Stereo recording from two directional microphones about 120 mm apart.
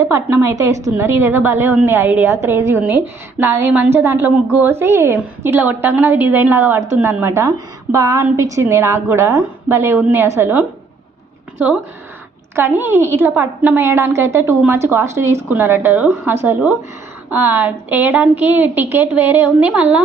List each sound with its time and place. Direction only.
0.0 s a woman's voice: 20° right (ahead or behind)